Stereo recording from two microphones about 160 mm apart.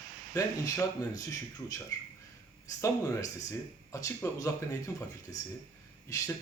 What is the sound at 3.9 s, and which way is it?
Speech, 20° left (ahead or behind).